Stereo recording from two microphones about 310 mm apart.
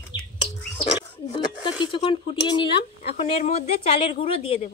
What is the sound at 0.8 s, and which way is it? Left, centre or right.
Bird, centre.